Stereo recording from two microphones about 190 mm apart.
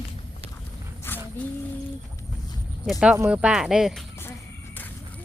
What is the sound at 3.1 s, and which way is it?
Speech, 10° right (ahead or behind).